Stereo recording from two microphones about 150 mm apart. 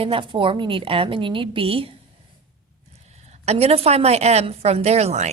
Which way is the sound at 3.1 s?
45° right (ahead or behind).